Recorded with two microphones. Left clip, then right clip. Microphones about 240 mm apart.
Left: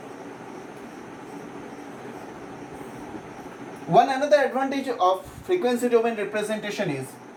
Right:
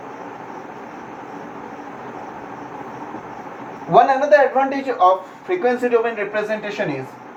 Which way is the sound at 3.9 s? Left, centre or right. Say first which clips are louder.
Right 6 dB; centre.